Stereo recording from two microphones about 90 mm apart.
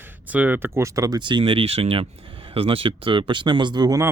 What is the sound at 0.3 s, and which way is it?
Speech, 20° right (ahead or behind).